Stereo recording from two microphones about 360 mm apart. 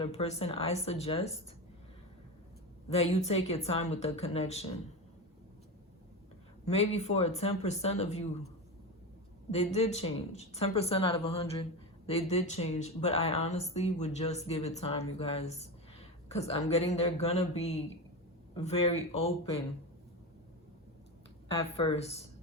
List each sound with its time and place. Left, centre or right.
0.0 s speech: centre
3.0 s speech: centre
6.7 s speech: centre
9.5 s speech: centre
21.6 s speech: centre